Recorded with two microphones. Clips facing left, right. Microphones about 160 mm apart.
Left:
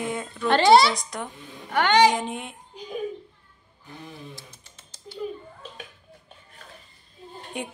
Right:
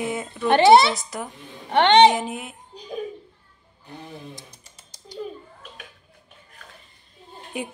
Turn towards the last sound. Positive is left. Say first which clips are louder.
# right 2 dB
turn(degrees=-5)  # may be behind; listen again after turning